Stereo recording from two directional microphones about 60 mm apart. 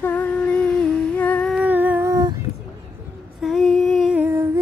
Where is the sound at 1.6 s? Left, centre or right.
Right.